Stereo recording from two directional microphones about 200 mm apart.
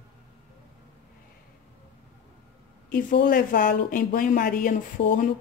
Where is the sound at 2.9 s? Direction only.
45° left (ahead or behind).